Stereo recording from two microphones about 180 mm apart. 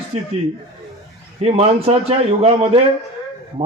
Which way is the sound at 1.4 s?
35° right (ahead or behind).